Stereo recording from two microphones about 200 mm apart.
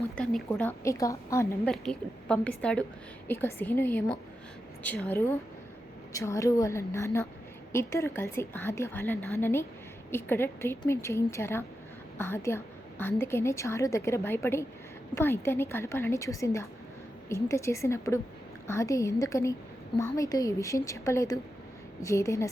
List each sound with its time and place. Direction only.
0.2 s a woman's voice: 5° left (ahead or behind)
1.7 s a woman's voice: 5° left (ahead or behind)